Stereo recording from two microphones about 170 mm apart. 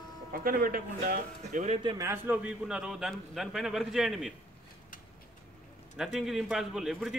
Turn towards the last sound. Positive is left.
turn(degrees=0)  # may be behind; listen again after turning